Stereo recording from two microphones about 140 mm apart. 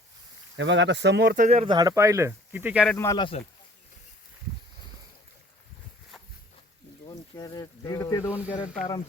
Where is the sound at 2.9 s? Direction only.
20° left (ahead or behind).